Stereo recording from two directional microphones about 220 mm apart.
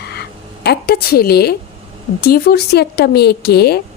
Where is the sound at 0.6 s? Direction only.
45° left (ahead or behind).